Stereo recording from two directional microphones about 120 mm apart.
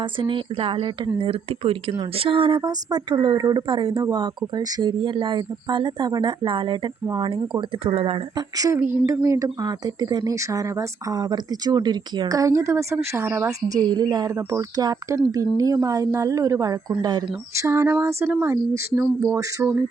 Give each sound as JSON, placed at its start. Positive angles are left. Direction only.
{"t": 0.0, "sound": "speech", "side_deg": -45}
{"t": 7.9, "sound": "speech", "side_deg": -50}
{"t": 8.4, "sound": "speech", "side_deg": -30}
{"t": 8.8, "sound": "speech", "side_deg": -20}
{"t": 13.7, "sound": "speech", "side_deg": -35}
{"t": 17.5, "sound": "speech", "side_deg": -25}